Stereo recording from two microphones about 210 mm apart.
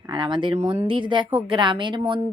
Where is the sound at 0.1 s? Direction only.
20° right (ahead or behind).